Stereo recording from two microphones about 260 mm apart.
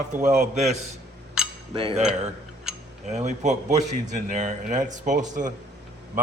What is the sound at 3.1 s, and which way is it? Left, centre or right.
A man's voice, right.